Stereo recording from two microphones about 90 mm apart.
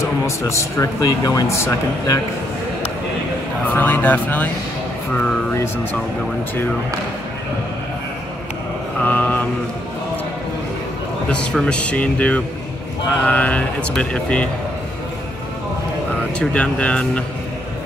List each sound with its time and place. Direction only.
0.0 s speech: 35° left (ahead or behind)
3.6 s speech: 20° left (ahead or behind)
9.0 s mantra: 20° left (ahead or behind)
11.2 s speech: 10° left (ahead or behind)
16.3 s speech: 15° left (ahead or behind)